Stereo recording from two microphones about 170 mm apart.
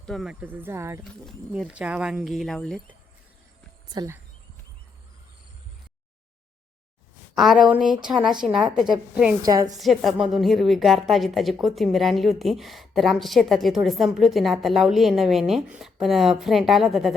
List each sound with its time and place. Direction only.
0.0 s speech: centre (ahead or behind); by 1.0 s 15° right (ahead or behind)
1.2 s a woman's voice: centre (ahead or behind)
3.8 s speech: 25° right (ahead or behind)
7.3 s a woman's voice: centre (ahead or behind)
9.4 s a woman's voice: 20° right (ahead or behind)
9.7 s a woman's voice: centre (ahead or behind)